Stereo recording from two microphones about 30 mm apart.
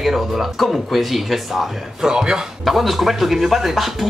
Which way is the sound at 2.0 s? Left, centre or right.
Right.